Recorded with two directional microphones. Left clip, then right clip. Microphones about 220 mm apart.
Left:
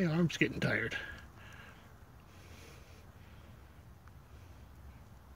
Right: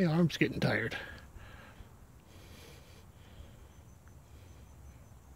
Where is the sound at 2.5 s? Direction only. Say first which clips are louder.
Right 1 dB; 15° right (ahead or behind).